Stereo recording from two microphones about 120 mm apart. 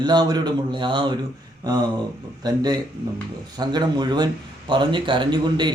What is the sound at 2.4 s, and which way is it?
Speech, 35° right (ahead or behind).